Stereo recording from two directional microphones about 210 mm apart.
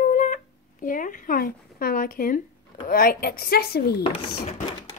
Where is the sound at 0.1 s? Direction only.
40° left (ahead or behind).